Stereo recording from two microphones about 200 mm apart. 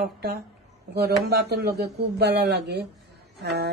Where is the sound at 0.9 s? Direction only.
55° right (ahead or behind).